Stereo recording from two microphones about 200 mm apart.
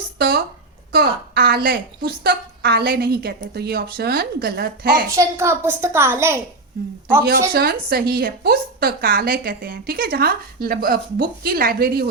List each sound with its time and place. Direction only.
0.2 s a woman's voice: 50° right (ahead or behind)
5.0 s a woman's voice: 15° right (ahead or behind)
6.8 s a woman's voice: 55° right (ahead or behind)